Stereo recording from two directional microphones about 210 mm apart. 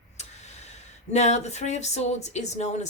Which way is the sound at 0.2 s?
30° left (ahead or behind).